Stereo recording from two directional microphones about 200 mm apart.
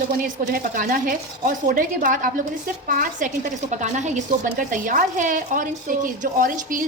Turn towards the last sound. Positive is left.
turn(degrees=-40)  # may be behind; listen again after turning